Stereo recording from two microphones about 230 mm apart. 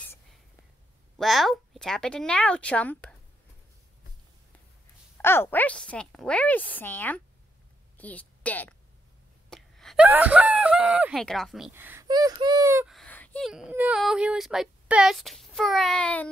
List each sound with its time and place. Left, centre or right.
1.1 s speech: centre
5.1 s a woman's voice: centre
12.9 s speech: centre